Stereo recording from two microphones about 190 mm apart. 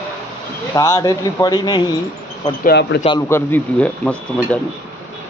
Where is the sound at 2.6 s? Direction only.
60° left (ahead or behind).